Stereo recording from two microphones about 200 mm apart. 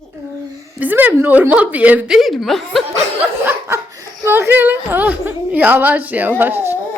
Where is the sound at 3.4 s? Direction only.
10° right (ahead or behind).